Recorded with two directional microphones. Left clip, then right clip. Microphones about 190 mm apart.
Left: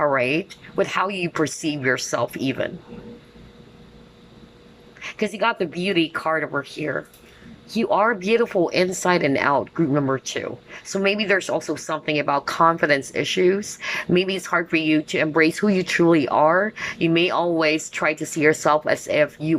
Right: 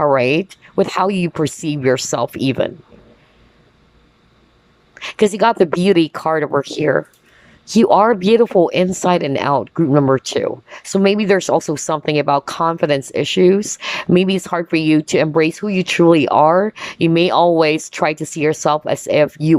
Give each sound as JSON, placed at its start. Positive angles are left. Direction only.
{"t": 0.0, "sound": "speech", "side_deg": -20}
{"t": 4.9, "sound": "speech", "side_deg": -25}